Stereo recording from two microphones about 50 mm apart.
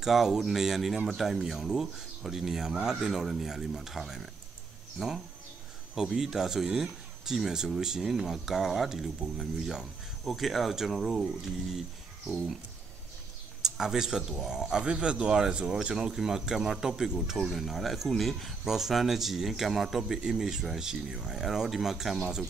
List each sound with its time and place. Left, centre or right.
0.0 s speech: centre
13.6 s speech: centre